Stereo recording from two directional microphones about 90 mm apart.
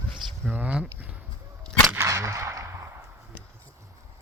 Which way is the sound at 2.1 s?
35° right (ahead or behind).